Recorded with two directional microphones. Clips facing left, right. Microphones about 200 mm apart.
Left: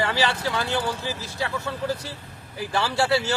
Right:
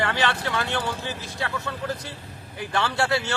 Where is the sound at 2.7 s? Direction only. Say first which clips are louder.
Left 1 dB; 5° left (ahead or behind).